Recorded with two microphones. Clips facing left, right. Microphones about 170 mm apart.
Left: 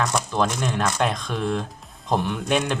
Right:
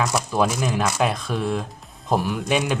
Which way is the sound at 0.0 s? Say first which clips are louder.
Right 2 dB; 5° right (ahead or behind).